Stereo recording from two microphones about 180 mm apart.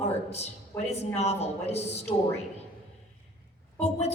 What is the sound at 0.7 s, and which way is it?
Speech, 15° left (ahead or behind).